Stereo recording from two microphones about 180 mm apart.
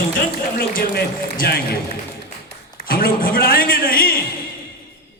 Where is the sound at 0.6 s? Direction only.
55° left (ahead or behind).